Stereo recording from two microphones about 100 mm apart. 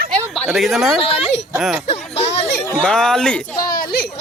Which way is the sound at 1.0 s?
80° left.